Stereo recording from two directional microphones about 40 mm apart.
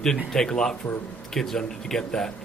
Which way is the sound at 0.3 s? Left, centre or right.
Centre.